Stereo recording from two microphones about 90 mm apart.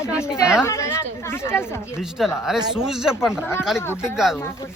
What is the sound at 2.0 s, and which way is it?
Speech, 5° right (ahead or behind).